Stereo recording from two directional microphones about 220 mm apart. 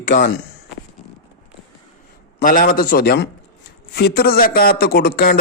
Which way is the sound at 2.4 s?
40° left (ahead or behind).